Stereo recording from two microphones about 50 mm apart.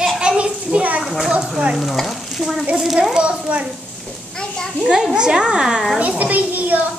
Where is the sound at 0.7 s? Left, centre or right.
Right.